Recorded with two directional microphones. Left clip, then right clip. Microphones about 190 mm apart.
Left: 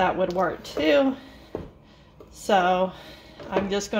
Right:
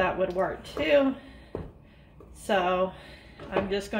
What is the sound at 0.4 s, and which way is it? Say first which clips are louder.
Speech: left 4 dB; 35° left (ahead or behind).